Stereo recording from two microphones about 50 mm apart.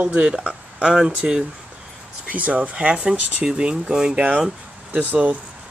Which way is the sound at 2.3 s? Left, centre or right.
Right.